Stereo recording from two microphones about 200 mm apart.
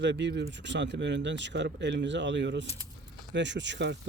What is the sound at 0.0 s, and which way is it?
Speech, 60° right (ahead or behind).